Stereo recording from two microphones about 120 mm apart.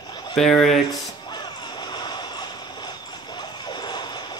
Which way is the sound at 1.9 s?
35° left (ahead or behind).